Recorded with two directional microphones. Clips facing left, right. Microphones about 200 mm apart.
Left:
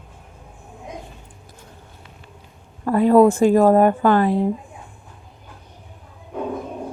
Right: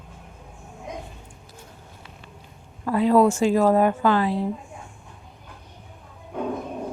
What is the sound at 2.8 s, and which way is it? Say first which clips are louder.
Speech: left 4 dB; 50° left (ahead or behind).